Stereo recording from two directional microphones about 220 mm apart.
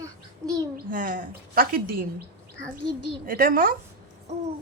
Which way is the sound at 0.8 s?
40° right (ahead or behind).